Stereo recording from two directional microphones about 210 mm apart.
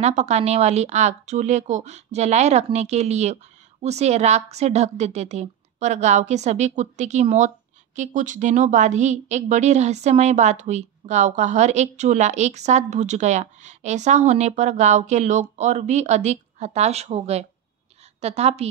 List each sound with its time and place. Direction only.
0.0 s a woman's voice: 30° right (ahead or behind)